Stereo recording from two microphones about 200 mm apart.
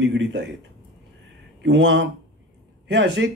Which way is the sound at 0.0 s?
65° right (ahead or behind).